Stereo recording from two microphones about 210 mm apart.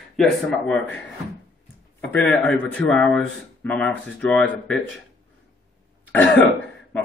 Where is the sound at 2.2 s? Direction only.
5° left (ahead or behind).